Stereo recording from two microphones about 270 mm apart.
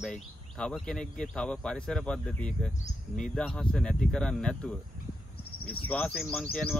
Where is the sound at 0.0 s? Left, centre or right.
Centre.